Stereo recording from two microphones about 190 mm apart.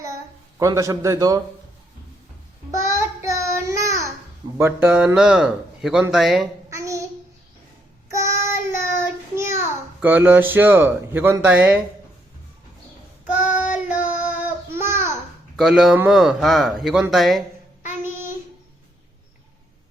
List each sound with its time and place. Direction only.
0.6 s speech: 15° right (ahead or behind)
2.8 s child singing: 15° right (ahead or behind)
4.5 s speech: 10° right (ahead or behind)
6.7 s child singing: 15° right (ahead or behind)
8.1 s child singing: 15° right (ahead or behind)
10.0 s speech: 10° right (ahead or behind)
13.2 s child singing: 10° right (ahead or behind)
15.5 s speech: centre (ahead or behind)